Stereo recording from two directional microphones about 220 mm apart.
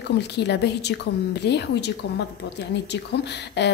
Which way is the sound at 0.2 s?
50° left (ahead or behind).